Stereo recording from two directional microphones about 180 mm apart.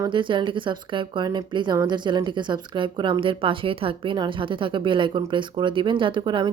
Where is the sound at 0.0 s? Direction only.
25° right (ahead or behind).